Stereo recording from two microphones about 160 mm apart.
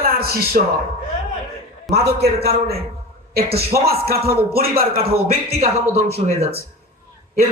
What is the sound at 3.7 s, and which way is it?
Speech, 15° right (ahead or behind).